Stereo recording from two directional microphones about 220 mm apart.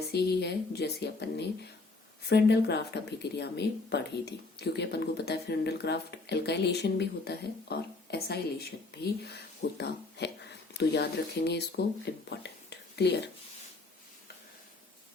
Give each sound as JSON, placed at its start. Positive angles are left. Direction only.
{"t": 0.1, "sound": "speech", "side_deg": 50}
{"t": 12.3, "sound": "whispering", "side_deg": 50}